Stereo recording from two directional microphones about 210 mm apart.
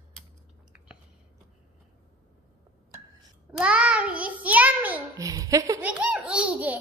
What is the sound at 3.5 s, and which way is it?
Child singing, 5° right (ahead or behind).